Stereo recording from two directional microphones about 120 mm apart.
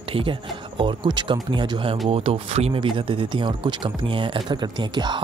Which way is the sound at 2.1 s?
55° right (ahead or behind).